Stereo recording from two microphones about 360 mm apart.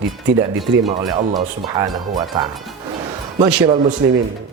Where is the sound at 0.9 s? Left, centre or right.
Centre.